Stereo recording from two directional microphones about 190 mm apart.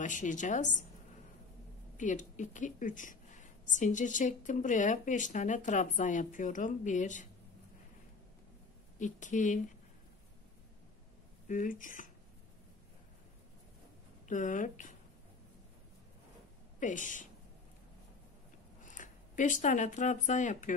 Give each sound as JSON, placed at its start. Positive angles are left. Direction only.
{"t": 0.0, "sound": "speech", "side_deg": 40}
{"t": 2.0, "sound": "speech", "side_deg": 40}
{"t": 8.9, "sound": "speech", "side_deg": 40}
{"t": 11.4, "sound": "speech", "side_deg": 40}
{"t": 14.2, "sound": "speech", "side_deg": 40}
{"t": 16.8, "sound": "speech", "side_deg": 45}
{"t": 18.8, "sound": "speech", "side_deg": 40}